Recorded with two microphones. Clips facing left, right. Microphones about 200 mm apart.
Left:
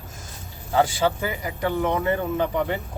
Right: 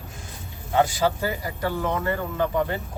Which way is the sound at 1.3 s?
15° left (ahead or behind).